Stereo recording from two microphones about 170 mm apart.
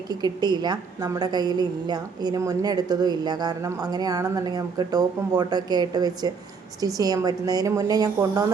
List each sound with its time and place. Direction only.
0.1 s a woman's voice: 25° right (ahead or behind)